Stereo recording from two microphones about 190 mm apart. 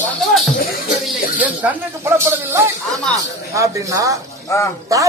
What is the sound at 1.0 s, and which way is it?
Speech, 10° right (ahead or behind).